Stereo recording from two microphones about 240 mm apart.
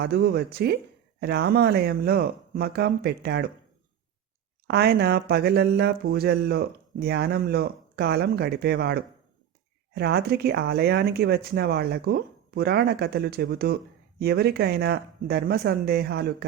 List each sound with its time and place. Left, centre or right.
0.0 s speech: right
4.7 s speech: right